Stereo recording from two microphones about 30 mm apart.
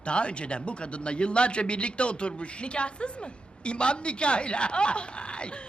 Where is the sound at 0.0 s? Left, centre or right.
Left.